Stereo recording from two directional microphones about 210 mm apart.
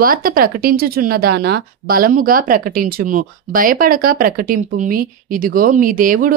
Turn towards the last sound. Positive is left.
turn(degrees=-40)  # may be behind; listen again after turning